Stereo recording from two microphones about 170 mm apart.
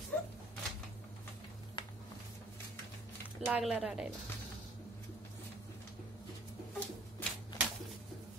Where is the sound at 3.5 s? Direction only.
5° right (ahead or behind).